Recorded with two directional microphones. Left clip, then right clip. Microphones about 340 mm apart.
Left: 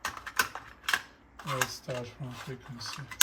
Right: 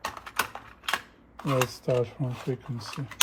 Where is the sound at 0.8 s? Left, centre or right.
Centre.